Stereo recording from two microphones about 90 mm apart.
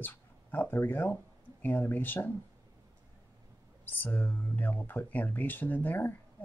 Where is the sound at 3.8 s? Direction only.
20° left (ahead or behind).